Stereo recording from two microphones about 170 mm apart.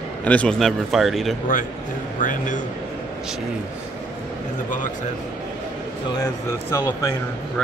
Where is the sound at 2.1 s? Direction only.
50° left (ahead or behind).